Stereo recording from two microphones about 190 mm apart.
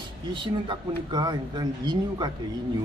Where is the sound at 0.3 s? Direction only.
25° right (ahead or behind).